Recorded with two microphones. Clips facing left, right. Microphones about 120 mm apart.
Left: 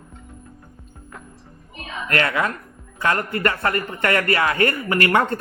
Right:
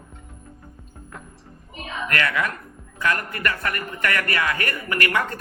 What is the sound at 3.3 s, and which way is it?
Speech, 30° left (ahead or behind).